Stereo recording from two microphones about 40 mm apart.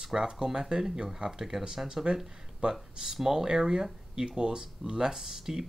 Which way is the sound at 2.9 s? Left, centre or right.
Centre.